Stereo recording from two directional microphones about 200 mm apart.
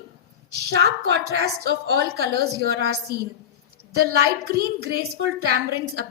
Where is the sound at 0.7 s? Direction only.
55° right (ahead or behind).